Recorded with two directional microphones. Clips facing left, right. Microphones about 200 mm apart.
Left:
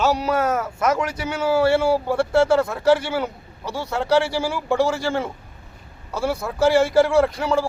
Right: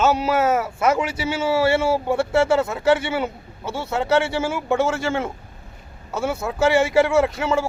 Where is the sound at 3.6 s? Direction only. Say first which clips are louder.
Even; 25° right (ahead or behind).